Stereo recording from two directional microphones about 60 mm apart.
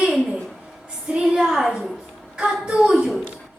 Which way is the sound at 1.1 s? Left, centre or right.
Centre.